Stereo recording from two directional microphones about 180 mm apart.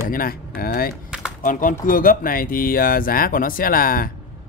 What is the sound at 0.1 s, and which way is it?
Speech, 55° left (ahead or behind).